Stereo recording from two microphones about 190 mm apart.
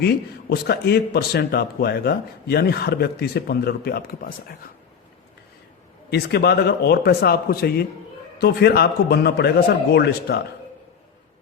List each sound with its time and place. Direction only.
0.0 s a man's voice: 55° left (ahead or behind)
6.1 s a man's voice: 60° left (ahead or behind)